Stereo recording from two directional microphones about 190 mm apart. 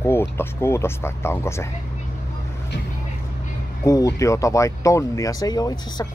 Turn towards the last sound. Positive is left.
turn(degrees=20)  # may be behind; listen again after turning